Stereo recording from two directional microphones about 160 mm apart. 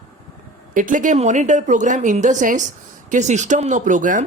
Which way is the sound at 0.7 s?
55° right (ahead or behind).